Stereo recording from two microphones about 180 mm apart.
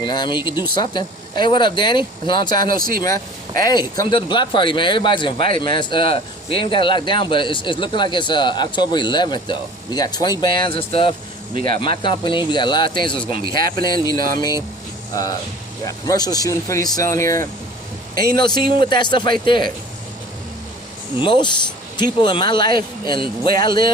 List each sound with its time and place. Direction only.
0.0 s speech: 25° left (ahead or behind)
2.6 s speech: 50° right (ahead or behind)
3.6 s speech: 20° left (ahead or behind)
21.2 s speech: 25° left (ahead or behind)